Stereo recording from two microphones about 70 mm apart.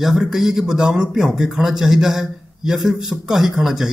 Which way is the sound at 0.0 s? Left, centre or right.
Centre.